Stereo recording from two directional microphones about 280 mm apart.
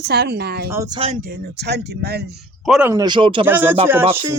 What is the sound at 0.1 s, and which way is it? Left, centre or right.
Speech, right.